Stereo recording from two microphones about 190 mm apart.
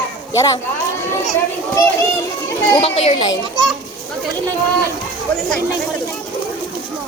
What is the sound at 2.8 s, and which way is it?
Speech, 30° left (ahead or behind).